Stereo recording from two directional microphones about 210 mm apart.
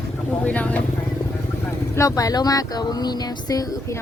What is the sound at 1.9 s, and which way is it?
Speech, 15° left (ahead or behind).